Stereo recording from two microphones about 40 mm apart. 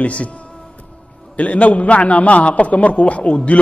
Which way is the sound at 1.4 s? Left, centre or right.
Left.